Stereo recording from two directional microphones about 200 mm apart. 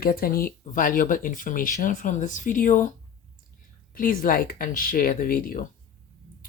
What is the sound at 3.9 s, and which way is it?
Speech, 45° left (ahead or behind).